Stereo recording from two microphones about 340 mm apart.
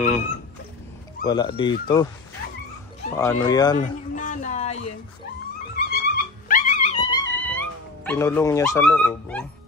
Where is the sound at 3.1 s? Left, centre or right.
Centre.